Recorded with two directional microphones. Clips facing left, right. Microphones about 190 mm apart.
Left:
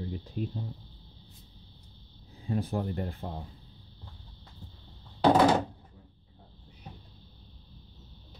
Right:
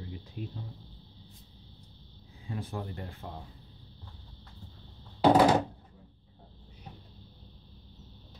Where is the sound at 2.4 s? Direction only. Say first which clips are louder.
Left 7 dB; 40° left (ahead or behind).